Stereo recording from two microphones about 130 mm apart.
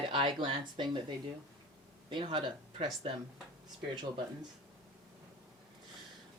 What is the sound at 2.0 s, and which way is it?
A woman's voice, 40° right (ahead or behind).